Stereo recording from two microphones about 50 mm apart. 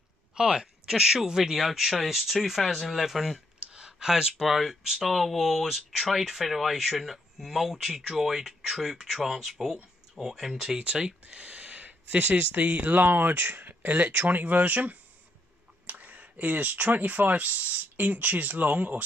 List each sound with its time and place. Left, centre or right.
0.3 s speech: centre
3.3 s speech: centre
10.8 s speech: right
12.8 s speech: right